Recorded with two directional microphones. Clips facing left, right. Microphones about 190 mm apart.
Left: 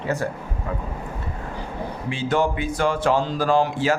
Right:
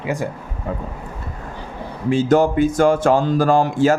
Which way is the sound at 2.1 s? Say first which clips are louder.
Right 8 dB; 45° right (ahead or behind).